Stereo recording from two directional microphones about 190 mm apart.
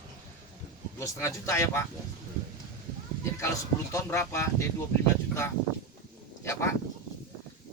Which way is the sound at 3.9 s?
15° left (ahead or behind).